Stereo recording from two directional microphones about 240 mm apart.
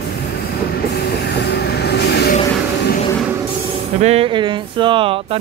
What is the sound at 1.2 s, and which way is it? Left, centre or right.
Vehicle, left.